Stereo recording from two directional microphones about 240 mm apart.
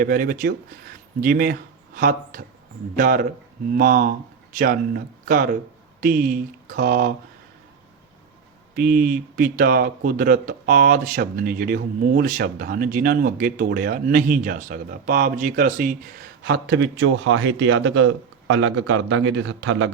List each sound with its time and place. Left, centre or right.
0.0 s speech: right
8.7 s speech: right